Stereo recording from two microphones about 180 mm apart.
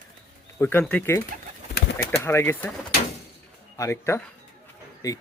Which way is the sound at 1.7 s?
65° left (ahead or behind).